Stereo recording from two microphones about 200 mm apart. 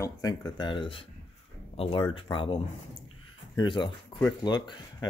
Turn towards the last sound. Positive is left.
turn(degrees=20)  # may be behind; listen again after turning